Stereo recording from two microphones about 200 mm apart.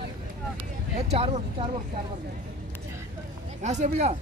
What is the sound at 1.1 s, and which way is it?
Speech, 30° right (ahead or behind).